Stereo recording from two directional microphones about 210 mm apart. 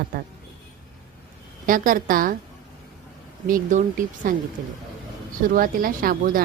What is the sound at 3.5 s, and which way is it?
Speech, 40° right (ahead or behind).